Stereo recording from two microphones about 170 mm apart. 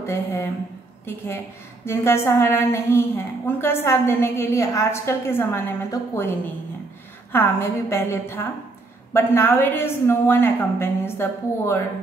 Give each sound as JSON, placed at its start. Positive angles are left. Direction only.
{"t": 0.0, "sound": "a sound", "side_deg": 15}
{"t": 1.0, "sound": "a woman's voice", "side_deg": 15}
{"t": 7.3, "sound": "a woman's voice", "side_deg": 15}